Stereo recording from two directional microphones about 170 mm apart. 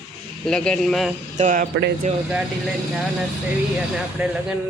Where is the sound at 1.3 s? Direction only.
45° right (ahead or behind).